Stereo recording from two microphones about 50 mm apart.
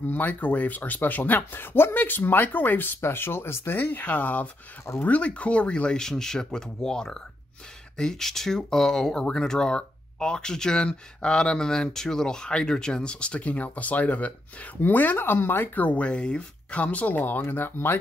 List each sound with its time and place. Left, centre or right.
0.0 s speech: left